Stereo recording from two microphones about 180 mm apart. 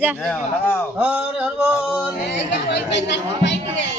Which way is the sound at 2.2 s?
75° left (ahead or behind).